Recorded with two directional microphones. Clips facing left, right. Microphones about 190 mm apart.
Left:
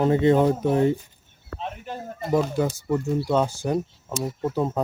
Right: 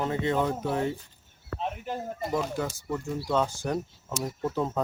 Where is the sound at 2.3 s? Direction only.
20° left (ahead or behind).